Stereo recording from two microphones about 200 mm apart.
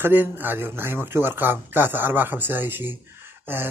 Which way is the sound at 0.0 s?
10° right (ahead or behind).